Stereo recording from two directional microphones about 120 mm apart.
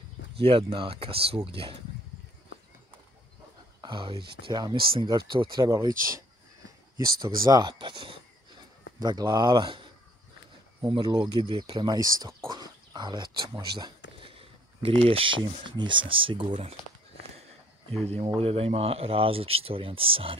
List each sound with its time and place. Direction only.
0.4 s speech: 50° right (ahead or behind)
3.8 s speech: 40° right (ahead or behind)
5.7 s speech: 25° right (ahead or behind)
7.2 s speech: 35° right (ahead or behind)
10.9 s speech: 45° right (ahead or behind)
12.4 s a sound: 35° right (ahead or behind)
14.3 s a sound: 50° right (ahead or behind)
15.6 s speech: 40° right (ahead or behind)
18.2 s speech: 50° right (ahead or behind)